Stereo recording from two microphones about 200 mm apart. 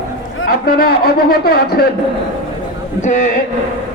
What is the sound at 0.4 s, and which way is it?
A man's voice, 50° left (ahead or behind).